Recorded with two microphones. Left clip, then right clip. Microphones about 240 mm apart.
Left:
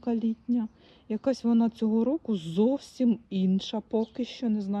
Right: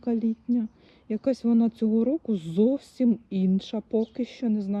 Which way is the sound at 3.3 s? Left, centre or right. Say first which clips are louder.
Right 2 dB; centre.